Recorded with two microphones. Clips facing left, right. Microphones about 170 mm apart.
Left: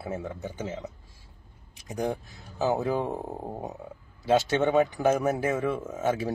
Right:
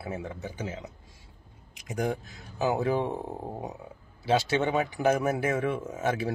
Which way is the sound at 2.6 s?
15° right (ahead or behind).